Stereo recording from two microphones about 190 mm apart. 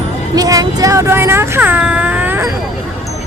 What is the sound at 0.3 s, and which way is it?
Speech, 20° right (ahead or behind).